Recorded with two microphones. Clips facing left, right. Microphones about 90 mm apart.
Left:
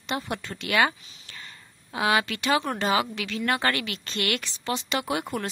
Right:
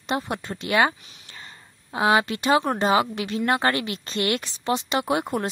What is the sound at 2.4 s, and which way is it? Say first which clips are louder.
Speech: right 4 dB; 40° right (ahead or behind).